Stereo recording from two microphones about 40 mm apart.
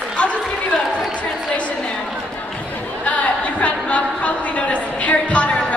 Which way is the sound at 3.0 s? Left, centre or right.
Left.